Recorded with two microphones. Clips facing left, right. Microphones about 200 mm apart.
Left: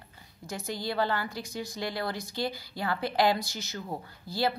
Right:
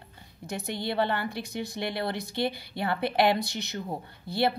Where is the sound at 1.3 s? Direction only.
65° right (ahead or behind).